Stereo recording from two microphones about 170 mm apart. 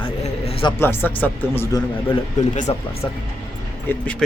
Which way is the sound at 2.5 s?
45° left (ahead or behind).